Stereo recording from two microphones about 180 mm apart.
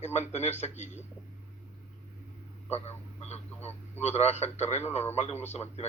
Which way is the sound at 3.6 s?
10° left (ahead or behind).